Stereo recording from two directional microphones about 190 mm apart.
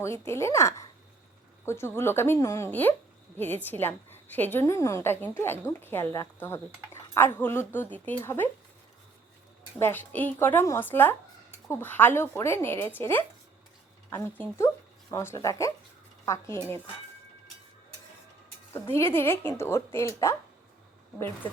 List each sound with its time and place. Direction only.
0.0 s a woman's voice: 15° left (ahead or behind)
9.7 s a woman's voice: 10° left (ahead or behind)
18.7 s a woman's voice: 10° left (ahead or behind)